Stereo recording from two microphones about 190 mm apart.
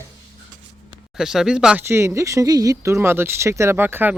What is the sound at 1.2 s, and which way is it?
Speech, 5° right (ahead or behind).